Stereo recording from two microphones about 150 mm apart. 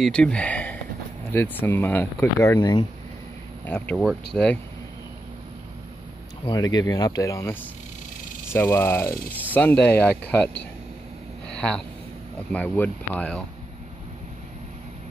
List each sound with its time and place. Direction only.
0.0 s speech: 5° left (ahead or behind)
3.6 s speech: 10° left (ahead or behind)
4.0 s speech: centre (ahead or behind)
6.4 s speech: 25° left (ahead or behind); by 10.5 s 10° left (ahead or behind)
12.5 s speech: 10° left (ahead or behind)